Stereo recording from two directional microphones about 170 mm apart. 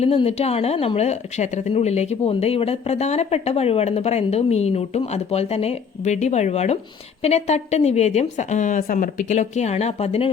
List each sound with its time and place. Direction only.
0.0 s a woman's voice: 35° left (ahead or behind)